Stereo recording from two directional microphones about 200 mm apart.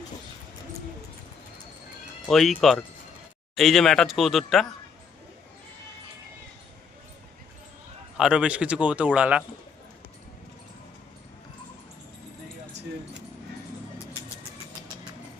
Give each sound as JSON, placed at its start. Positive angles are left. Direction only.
{"t": 2.2, "sound": "speech", "side_deg": 0}
{"t": 8.2, "sound": "speech", "side_deg": -5}